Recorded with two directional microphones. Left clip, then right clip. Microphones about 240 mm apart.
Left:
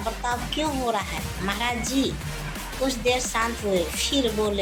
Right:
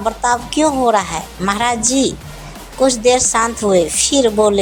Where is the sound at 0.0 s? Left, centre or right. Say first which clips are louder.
Right 11 dB; right.